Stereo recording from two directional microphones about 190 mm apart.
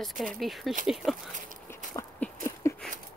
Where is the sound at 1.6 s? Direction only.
15° left (ahead or behind).